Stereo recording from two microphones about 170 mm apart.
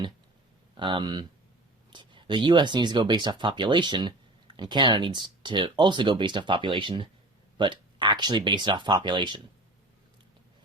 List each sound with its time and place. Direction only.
0.8 s speech: 30° right (ahead or behind)